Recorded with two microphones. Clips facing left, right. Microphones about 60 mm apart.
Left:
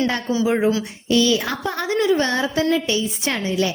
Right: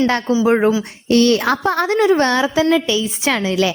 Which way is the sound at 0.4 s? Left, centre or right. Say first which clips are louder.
Right 4 dB; right.